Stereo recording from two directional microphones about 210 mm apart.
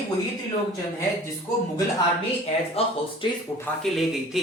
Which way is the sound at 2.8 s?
30° left (ahead or behind).